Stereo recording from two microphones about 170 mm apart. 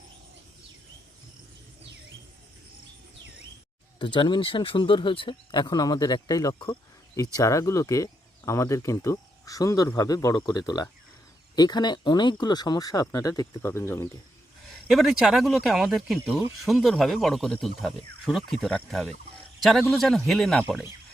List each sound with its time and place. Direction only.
3.9 s speech: 30° left (ahead or behind)
14.7 s speech: centre (ahead or behind)